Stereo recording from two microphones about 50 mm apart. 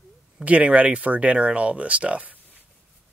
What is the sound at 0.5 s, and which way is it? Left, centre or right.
Speech, right.